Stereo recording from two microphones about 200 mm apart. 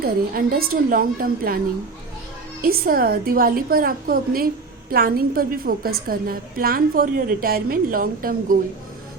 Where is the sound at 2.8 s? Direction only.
50° right (ahead or behind).